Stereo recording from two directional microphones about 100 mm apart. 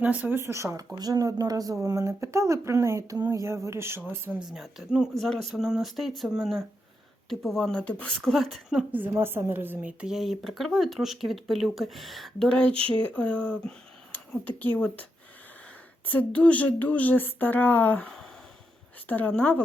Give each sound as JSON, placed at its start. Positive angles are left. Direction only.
{"t": 0.0, "sound": "a woman's voice", "side_deg": -15}
{"t": 3.4, "sound": "a woman's voice", "side_deg": -30}
{"t": 4.5, "sound": "speech", "side_deg": -5}
{"t": 8.9, "sound": "a woman's voice", "side_deg": -20}
{"t": 10.2, "sound": "speech", "side_deg": 0}
{"t": 12.5, "sound": "speech", "side_deg": 10}
{"t": 16.0, "sound": "speech", "side_deg": 15}